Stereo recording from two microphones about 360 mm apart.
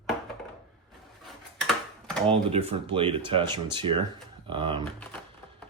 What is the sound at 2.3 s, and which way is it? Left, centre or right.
Speech, centre.